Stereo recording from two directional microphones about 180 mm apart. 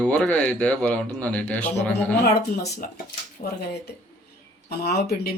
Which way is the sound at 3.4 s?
50° left (ahead or behind).